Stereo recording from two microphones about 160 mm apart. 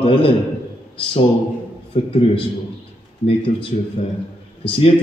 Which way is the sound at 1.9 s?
35° left (ahead or behind).